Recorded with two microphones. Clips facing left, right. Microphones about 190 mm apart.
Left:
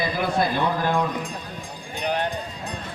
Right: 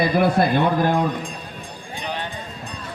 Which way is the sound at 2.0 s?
50° left (ahead or behind).